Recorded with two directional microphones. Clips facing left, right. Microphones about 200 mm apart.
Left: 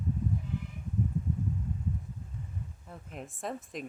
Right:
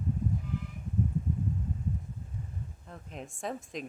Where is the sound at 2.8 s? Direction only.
5° left (ahead or behind).